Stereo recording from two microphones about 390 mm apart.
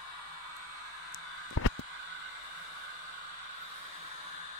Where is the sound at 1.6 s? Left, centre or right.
Left.